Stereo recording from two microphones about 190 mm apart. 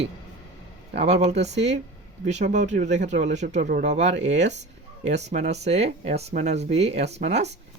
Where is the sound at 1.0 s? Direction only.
35° right (ahead or behind).